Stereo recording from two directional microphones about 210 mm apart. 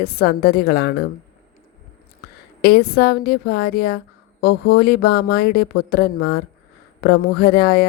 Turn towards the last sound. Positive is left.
turn(degrees=45)  # may be behind; listen again after turning